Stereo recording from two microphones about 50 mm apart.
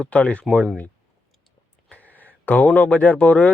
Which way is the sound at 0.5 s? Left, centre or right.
Centre.